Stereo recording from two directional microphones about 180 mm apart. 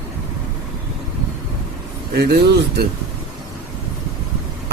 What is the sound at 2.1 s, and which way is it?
Speech, 65° right (ahead or behind).